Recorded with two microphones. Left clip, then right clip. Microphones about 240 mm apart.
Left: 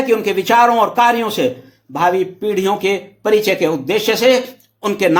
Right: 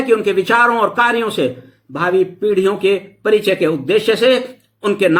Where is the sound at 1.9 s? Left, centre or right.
Centre.